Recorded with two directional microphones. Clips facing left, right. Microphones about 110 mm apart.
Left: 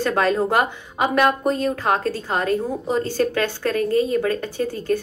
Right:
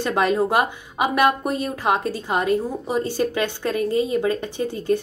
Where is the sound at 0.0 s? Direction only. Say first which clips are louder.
Even; 15° right (ahead or behind).